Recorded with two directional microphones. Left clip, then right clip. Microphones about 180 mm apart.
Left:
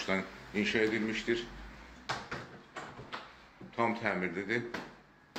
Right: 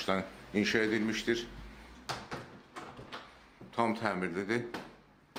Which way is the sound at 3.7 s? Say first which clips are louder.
Even; 40° right (ahead or behind).